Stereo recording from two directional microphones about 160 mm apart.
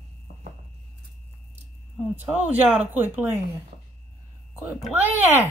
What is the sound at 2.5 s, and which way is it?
Speech, 10° right (ahead or behind).